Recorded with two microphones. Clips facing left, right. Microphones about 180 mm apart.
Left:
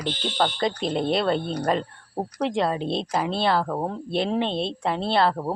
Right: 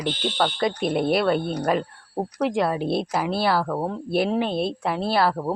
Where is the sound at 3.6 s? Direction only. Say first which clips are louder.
Right 1 dB; 10° left (ahead or behind).